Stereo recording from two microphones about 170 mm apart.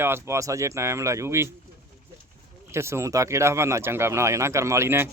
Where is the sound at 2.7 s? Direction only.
15° right (ahead or behind).